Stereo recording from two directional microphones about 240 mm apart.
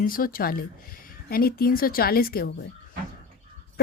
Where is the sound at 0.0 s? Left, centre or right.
Left.